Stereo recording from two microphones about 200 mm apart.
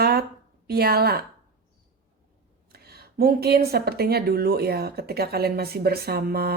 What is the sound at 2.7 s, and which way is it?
Speech, 50° right (ahead or behind).